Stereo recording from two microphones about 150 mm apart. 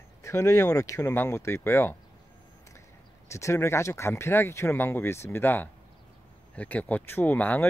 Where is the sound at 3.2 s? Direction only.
20° left (ahead or behind).